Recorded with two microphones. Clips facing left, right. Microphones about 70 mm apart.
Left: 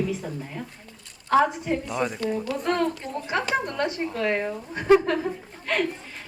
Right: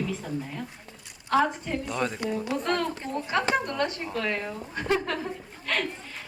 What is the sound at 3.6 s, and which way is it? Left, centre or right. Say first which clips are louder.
Speech: left 1 dB; centre.